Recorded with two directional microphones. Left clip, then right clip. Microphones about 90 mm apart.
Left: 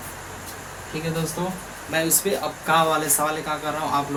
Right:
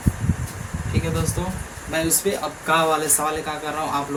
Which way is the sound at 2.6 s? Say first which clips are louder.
Right 1 dB; 5° left (ahead or behind).